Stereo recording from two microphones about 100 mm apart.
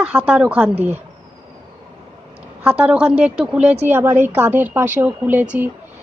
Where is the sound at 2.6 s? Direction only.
15° right (ahead or behind).